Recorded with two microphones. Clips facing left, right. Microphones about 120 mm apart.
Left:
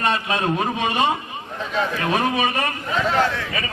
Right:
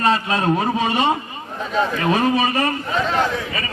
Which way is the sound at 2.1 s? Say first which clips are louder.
Right 2 dB; 35° right (ahead or behind).